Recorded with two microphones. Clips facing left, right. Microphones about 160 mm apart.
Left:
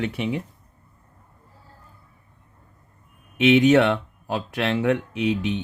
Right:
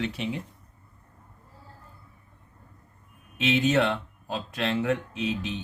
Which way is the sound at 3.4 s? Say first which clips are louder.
Left 8 dB; 65° left (ahead or behind).